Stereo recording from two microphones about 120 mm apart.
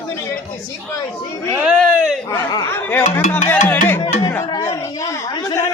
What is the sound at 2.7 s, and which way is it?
Music, 15° left (ahead or behind).